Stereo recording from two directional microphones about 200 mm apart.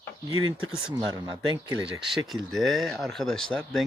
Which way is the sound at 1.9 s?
Centre (ahead or behind).